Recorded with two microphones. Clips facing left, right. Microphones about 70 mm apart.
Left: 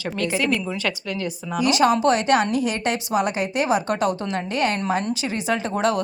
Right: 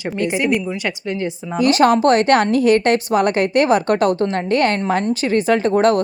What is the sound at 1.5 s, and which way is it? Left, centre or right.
A woman's voice, right.